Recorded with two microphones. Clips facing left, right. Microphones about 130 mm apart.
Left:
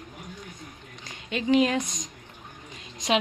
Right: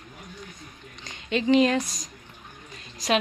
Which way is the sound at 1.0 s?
10° left (ahead or behind).